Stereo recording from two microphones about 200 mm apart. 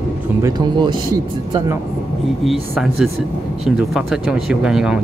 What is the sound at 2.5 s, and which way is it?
Speech, centre (ahead or behind).